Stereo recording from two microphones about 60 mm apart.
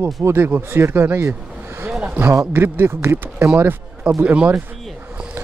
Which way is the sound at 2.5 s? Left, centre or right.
Right.